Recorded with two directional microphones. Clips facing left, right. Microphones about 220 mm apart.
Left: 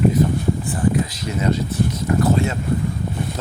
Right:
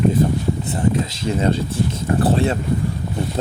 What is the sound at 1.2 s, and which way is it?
Speech, 30° right (ahead or behind).